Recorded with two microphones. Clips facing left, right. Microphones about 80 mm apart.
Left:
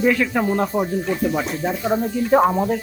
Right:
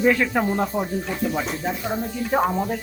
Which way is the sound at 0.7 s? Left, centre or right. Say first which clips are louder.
Left 4 dB; centre.